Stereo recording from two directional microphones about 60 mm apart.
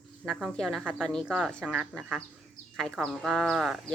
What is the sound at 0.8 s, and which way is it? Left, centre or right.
Speech, right.